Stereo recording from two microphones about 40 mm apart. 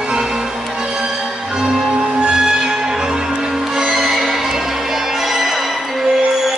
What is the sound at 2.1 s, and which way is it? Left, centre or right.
Music, right.